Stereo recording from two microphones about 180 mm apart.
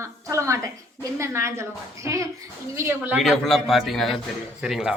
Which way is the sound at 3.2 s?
Centre (ahead or behind).